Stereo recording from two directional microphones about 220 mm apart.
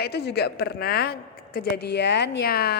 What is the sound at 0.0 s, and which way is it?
A woman's voice, 50° left (ahead or behind).